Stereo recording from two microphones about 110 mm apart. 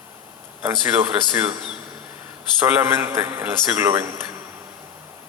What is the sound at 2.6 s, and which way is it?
A man's voice, 20° right (ahead or behind).